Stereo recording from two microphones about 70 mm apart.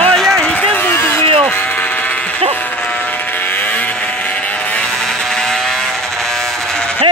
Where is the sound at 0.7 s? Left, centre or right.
Left.